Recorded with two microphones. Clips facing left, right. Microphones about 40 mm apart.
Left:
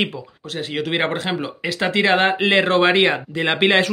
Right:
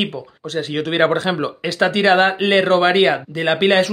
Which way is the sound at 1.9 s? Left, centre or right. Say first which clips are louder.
Right 2 dB; centre.